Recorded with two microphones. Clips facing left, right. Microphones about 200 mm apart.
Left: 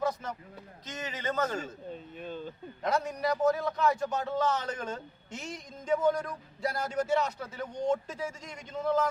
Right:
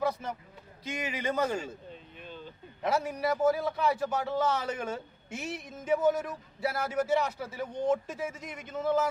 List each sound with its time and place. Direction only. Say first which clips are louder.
0.0 s a sound: right 1 dB; 10° right (ahead or behind)
0.9 s a man's voice: right 3 dB; 10° right (ahead or behind)
2.1 s speech: left 6 dB; 45° left (ahead or behind)
2.8 s a man's voice: right 1 dB; 5° right (ahead or behind)